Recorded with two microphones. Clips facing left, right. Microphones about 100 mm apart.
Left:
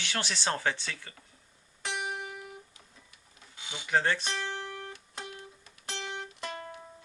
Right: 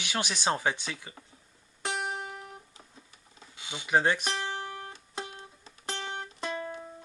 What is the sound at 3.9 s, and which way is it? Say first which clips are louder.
Speech: right 2 dB; 15° right (ahead or behind).